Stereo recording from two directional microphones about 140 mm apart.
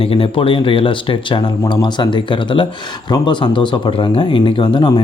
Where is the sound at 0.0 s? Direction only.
40° left (ahead or behind).